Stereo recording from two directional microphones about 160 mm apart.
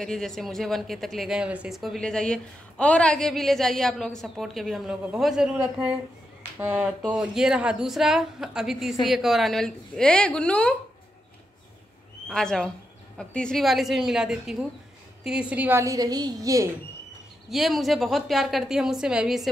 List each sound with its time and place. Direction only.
0.0 s speech: 5° left (ahead or behind)
12.3 s a woman's voice: 5° left (ahead or behind); by 16.6 s 20° right (ahead or behind)
17.5 s speech: centre (ahead or behind)